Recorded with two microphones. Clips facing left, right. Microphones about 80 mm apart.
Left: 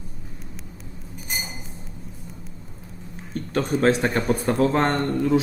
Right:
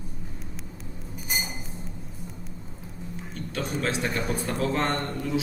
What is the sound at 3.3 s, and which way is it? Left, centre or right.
Speech, left.